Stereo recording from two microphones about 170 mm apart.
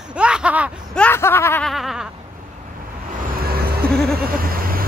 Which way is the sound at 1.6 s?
Centre (ahead or behind).